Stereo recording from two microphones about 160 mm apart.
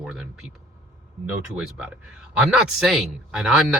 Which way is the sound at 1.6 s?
5° right (ahead or behind).